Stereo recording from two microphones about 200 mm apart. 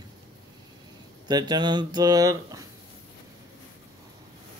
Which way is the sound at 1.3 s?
20° right (ahead or behind).